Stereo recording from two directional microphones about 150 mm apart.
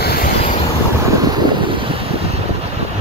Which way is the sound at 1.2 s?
25° right (ahead or behind).